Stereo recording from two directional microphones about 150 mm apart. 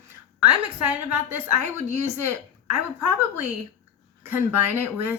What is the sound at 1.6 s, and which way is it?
Speech, 50° right (ahead or behind).